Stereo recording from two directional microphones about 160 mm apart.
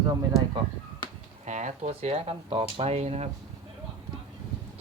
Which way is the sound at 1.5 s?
50° right (ahead or behind).